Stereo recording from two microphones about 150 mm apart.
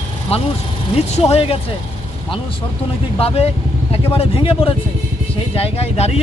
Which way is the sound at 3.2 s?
40° left (ahead or behind).